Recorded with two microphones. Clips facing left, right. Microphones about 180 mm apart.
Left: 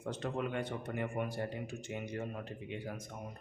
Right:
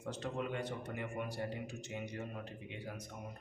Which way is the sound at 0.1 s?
55° left (ahead or behind).